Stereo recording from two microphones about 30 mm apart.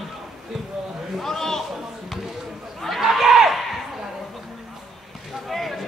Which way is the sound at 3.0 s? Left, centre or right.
Centre.